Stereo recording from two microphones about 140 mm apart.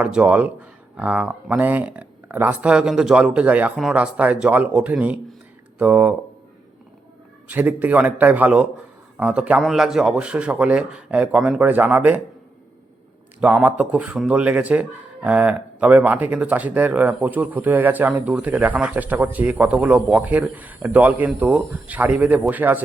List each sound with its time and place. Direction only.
0.0 s a man's voice: 10° right (ahead or behind)
7.4 s a man's voice: 10° right (ahead or behind)
13.4 s a man's voice: 10° right (ahead or behind)